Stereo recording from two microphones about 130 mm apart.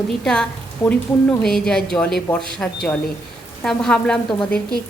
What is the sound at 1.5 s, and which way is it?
A woman's voice, 5° left (ahead or behind).